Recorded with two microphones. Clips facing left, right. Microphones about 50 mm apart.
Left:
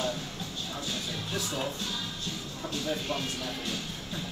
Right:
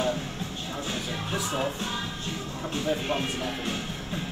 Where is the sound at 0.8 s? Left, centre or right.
Right.